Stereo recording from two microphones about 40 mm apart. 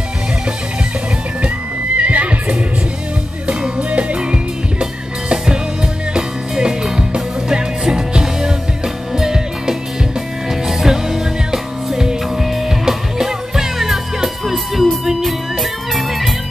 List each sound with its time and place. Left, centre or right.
2.0 s neigh: right
3.4 s music: right
6.1 s music: centre